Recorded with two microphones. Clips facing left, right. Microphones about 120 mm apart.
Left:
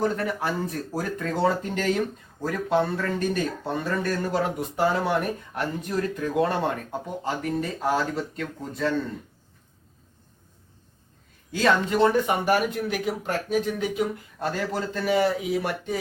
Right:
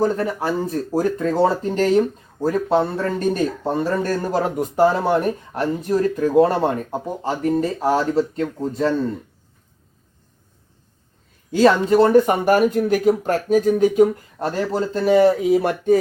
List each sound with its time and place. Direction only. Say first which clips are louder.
0.0 s speech: right 5 dB; 30° right (ahead or behind)
11.5 s speech: right 8 dB; 40° right (ahead or behind)